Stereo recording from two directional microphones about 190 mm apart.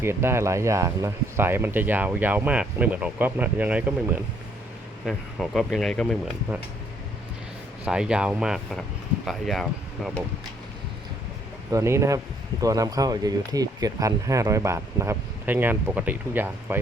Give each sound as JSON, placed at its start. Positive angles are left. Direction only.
{"t": 0.0, "sound": "speech", "side_deg": -10}
{"t": 5.0, "sound": "speech", "side_deg": 0}
{"t": 7.9, "sound": "speech", "side_deg": -5}
{"t": 11.7, "sound": "speech", "side_deg": -15}